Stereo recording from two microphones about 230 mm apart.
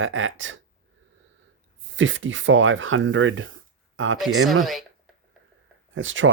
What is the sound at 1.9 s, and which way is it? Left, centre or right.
Speech, right.